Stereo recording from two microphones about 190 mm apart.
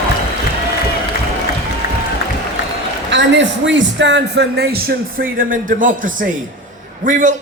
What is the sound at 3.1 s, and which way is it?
A man's voice, 70° right (ahead or behind).